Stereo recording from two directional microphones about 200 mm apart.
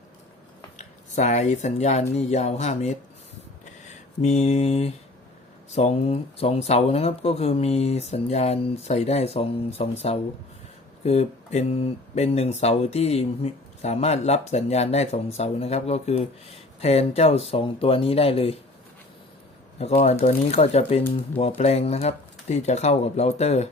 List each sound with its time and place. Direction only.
0.8 s speech: 35° left (ahead or behind)
3.8 s mantra: 35° left (ahead or behind)
5.7 s speech: 30° left (ahead or behind)
19.8 s speech: 30° left (ahead or behind)